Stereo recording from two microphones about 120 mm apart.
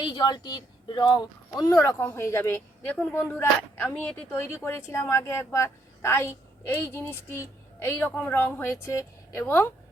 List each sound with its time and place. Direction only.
0.0 s a woman's voice: 35° left (ahead or behind); by 9.6 s 20° left (ahead or behind)